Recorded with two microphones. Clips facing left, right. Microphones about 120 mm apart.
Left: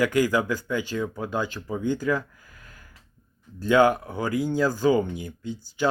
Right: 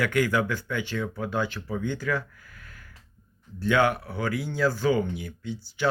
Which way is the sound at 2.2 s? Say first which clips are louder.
Left 1 dB; 15° left (ahead or behind).